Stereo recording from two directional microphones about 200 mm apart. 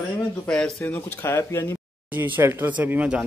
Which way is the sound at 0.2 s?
5° left (ahead or behind).